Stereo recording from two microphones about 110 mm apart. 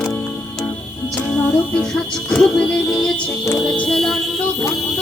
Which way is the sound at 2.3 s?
5° left (ahead or behind).